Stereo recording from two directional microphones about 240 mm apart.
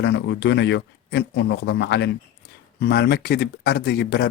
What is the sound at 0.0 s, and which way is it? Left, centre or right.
Speech, left.